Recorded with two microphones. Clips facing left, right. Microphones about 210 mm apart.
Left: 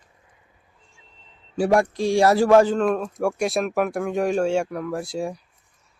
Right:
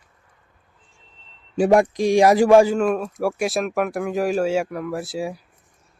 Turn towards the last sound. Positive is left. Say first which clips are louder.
# even
turn(degrees=-5)  # may be behind; listen again after turning